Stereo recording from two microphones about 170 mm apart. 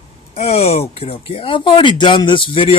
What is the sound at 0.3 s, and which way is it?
Speech, 40° left (ahead or behind).